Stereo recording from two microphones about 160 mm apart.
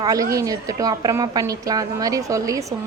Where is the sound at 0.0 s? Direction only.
20° right (ahead or behind).